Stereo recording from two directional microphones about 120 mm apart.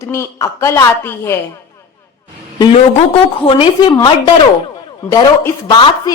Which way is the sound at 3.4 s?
45° left (ahead or behind).